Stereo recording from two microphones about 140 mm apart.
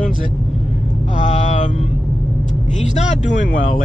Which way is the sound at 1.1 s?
60° left (ahead or behind).